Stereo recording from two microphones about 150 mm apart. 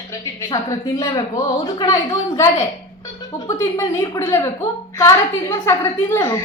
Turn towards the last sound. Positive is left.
turn(degrees=20)  # may be behind; listen again after turning